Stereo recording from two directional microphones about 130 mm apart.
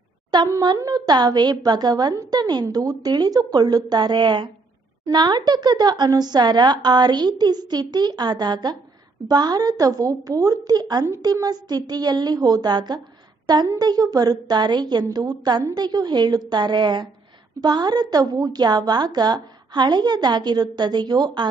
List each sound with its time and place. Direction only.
0.3 s a woman's voice: 30° right (ahead or behind)